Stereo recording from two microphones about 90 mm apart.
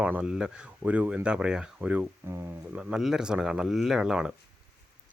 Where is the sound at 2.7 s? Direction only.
10° right (ahead or behind).